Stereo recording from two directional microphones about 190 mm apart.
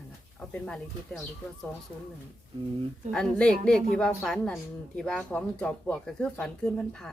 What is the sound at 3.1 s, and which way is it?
Speech, 5° left (ahead or behind).